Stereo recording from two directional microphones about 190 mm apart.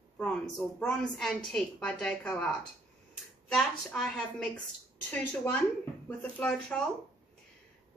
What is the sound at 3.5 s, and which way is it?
Child singing, centre (ahead or behind).